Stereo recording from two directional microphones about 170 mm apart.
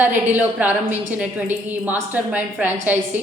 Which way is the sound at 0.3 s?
10° right (ahead or behind).